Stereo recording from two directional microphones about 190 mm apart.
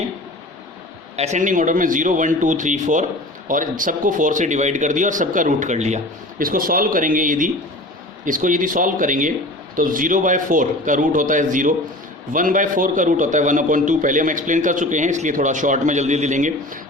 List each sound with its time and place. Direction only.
1.1 s a man's voice: 35° right (ahead or behind)
6.4 s a man's voice: 50° right (ahead or behind)